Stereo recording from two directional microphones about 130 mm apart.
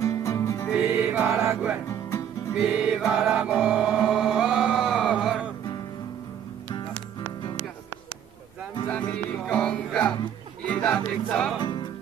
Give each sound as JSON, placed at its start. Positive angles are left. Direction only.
{"t": 0.0, "sound": "music", "side_deg": 25}
{"t": 0.9, "sound": "music", "side_deg": -5}
{"t": 1.9, "sound": "music", "side_deg": 20}
{"t": 2.5, "sound": "music", "side_deg": -5}
{"t": 8.8, "sound": "music", "side_deg": 10}
{"t": 11.5, "sound": "music", "side_deg": 40}